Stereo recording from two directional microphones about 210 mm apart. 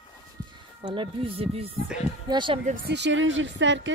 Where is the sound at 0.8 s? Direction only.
25° right (ahead or behind).